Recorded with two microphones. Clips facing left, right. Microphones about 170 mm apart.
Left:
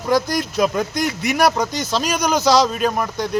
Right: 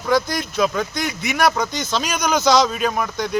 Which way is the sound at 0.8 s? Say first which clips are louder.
Left 3 dB; 35° left (ahead or behind).